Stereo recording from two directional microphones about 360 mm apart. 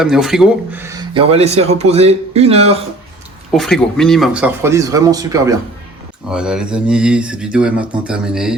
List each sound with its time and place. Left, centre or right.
0.0 s speech: centre
3.5 s speech: centre